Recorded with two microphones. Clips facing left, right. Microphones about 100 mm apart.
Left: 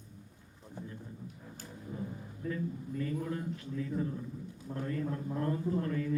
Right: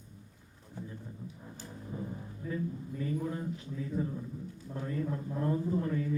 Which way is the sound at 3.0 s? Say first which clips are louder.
Right 1 dB; 15° right (ahead or behind).